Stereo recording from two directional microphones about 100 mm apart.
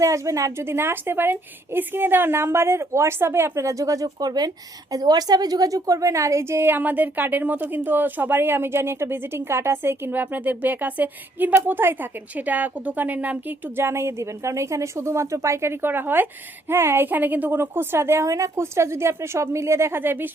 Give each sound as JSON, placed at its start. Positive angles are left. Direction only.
{"t": 0.0, "sound": "a woman's voice", "side_deg": -35}